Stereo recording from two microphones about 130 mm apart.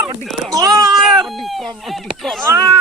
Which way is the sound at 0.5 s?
30° right (ahead or behind).